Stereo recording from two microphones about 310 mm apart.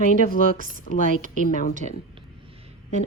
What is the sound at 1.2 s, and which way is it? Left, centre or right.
Speech, right.